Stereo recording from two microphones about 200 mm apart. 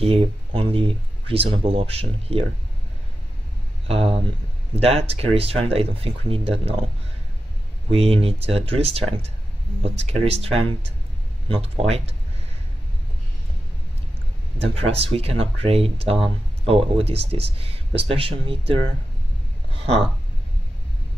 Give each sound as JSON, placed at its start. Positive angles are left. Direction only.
{"t": 0.0, "sound": "speech", "side_deg": -30}
{"t": 3.8, "sound": "speech", "side_deg": -30}
{"t": 7.9, "sound": "speech", "side_deg": -30}
{"t": 14.6, "sound": "speech", "side_deg": -30}